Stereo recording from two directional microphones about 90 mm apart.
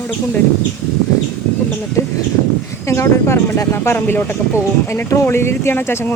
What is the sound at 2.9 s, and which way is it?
Speech, 30° left (ahead or behind).